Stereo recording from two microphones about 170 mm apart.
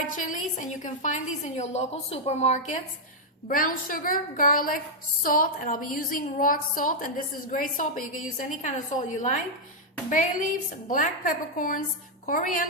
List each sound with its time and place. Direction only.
0.1 s a woman's voice: 50° left (ahead or behind)
3.5 s a woman's voice: 55° left (ahead or behind)
10.8 s a woman's voice: 50° left (ahead or behind)